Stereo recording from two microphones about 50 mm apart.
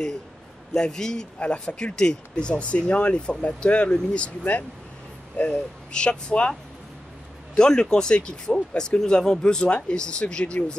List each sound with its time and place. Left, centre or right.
0.7 s speech: centre
5.4 s speech: left
7.5 s speech: centre